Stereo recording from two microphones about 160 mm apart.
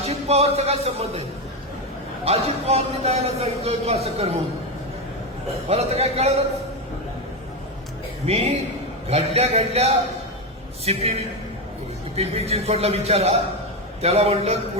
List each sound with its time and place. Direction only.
0.0 s speech: 40° right (ahead or behind)
2.2 s a man's voice: 40° right (ahead or behind)
5.6 s a man's voice: 40° right (ahead or behind)
8.3 s a man's voice: 40° right (ahead or behind)